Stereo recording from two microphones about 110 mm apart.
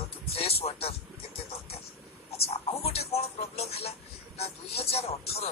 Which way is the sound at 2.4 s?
70° left (ahead or behind).